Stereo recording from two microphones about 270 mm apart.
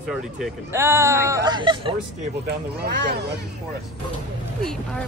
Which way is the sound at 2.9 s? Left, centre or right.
Right.